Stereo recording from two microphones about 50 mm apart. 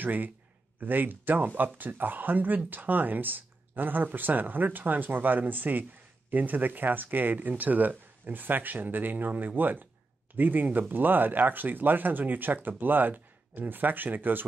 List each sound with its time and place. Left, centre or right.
0.0 s speech: right